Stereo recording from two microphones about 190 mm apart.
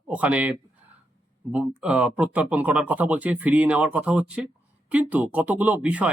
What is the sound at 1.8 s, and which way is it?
Speech, 5° right (ahead or behind).